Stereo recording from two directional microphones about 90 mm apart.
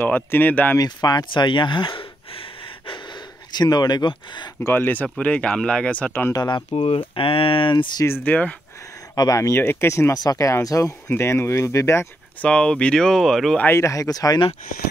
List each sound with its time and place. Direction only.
0.0 s speech: 20° left (ahead or behind)
0.7 s speech: 50° left (ahead or behind); by 2.4 s 70° left (ahead or behind)
3.5 s speech: 50° left (ahead or behind)
4.6 s speech: 25° left (ahead or behind)
6.3 s speech: 50° left (ahead or behind)
6.7 s speech: 90° left
8.2 s speech: 15° left (ahead or behind)
9.1 s speech: 40° left (ahead or behind)
9.6 s speech: 25° left (ahead or behind)
10.1 s speech: 45° left (ahead or behind)
11.1 s speech: 25° left (ahead or behind)
12.4 s speech: 10° left (ahead or behind)
13.7 s speech: 35° left (ahead or behind)